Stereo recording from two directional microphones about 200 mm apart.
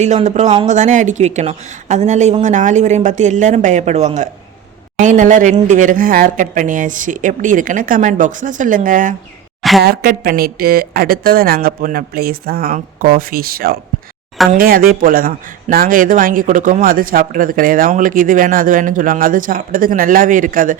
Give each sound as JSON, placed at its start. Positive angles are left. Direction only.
{"t": 0.0, "sound": "speech", "side_deg": -35}
{"t": 9.6, "sound": "a sound", "side_deg": 0}
{"t": 9.8, "sound": "speech", "side_deg": -50}